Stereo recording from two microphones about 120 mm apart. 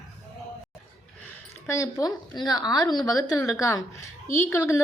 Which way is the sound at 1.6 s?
25° left (ahead or behind).